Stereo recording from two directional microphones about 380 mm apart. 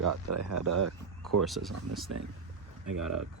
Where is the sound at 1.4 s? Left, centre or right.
Centre.